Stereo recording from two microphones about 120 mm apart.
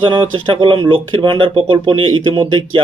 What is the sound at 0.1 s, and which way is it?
Speech, 45° right (ahead or behind).